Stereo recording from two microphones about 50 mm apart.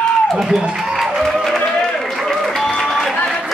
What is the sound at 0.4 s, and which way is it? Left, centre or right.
Speech, centre.